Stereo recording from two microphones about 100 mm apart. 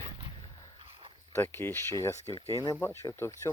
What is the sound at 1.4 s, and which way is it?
Speech, 25° left (ahead or behind).